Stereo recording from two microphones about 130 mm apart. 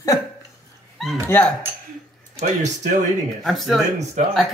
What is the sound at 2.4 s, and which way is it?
Speech, 65° right (ahead or behind).